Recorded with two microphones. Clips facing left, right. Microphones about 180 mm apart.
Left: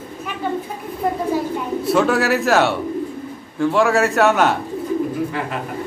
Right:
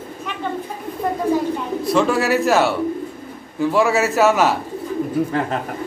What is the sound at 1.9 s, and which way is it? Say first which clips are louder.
A man's voice: even; centre (ahead or behind).